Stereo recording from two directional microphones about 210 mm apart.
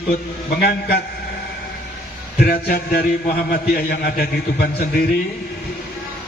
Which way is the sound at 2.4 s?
45° left (ahead or behind).